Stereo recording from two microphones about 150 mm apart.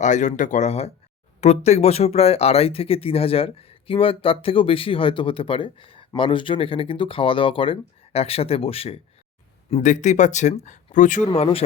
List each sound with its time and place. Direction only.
0.0 s speech: 55° left (ahead or behind)
11.3 s speech: 40° left (ahead or behind)